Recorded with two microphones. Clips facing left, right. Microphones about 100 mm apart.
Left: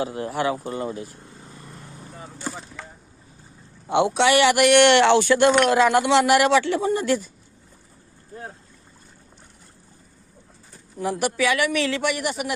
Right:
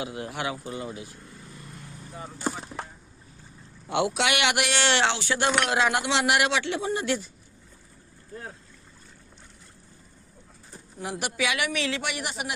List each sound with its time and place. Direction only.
0.0 s speech: 40° left (ahead or behind)
1.3 s vehicle: 30° left (ahead or behind)
3.8 s speech: 25° left (ahead or behind)
4.6 s speech: 60° left (ahead or behind)
11.1 s speech: 45° left (ahead or behind)